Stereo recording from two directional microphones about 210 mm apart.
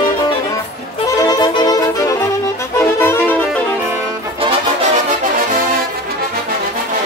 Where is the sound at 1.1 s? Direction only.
15° left (ahead or behind).